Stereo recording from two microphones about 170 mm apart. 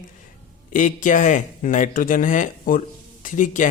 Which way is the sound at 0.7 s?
50° left (ahead or behind).